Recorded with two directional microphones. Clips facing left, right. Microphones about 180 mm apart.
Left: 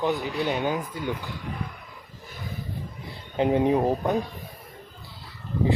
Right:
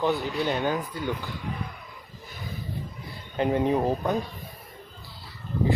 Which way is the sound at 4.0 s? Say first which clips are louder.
Left 2 dB; centre (ahead or behind).